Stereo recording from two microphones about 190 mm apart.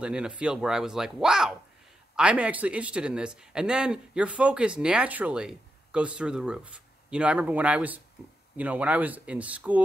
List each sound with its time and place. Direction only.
0.0 s speech: 5° right (ahead or behind)